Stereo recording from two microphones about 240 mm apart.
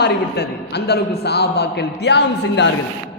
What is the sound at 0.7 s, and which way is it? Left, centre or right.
A man's voice, left.